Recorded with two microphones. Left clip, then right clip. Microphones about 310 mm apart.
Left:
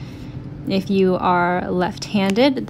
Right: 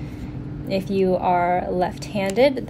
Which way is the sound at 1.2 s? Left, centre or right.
Centre.